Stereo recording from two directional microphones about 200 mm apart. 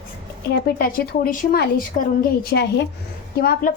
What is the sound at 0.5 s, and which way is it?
A woman's voice, 45° left (ahead or behind).